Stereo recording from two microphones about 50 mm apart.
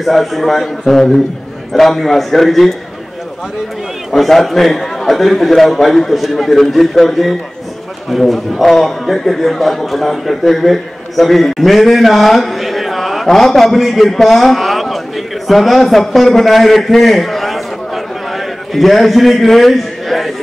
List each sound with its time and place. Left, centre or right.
0.0 s a man's voice: centre
4.1 s a man's voice: centre